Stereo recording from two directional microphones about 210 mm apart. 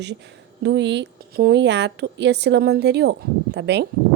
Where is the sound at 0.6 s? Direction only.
55° right (ahead or behind).